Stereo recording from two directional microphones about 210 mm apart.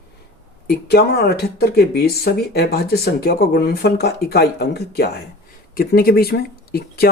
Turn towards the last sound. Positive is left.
turn(degrees=45)  # may be behind; listen again after turning